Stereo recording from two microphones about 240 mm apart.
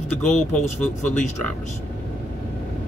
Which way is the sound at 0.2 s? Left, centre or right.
Centre.